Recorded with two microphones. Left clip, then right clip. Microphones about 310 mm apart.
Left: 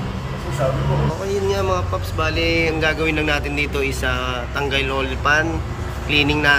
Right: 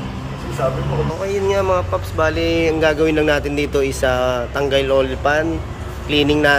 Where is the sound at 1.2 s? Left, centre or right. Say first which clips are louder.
Right 4 dB; centre.